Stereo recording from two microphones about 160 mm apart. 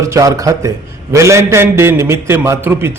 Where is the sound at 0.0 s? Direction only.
20° right (ahead or behind).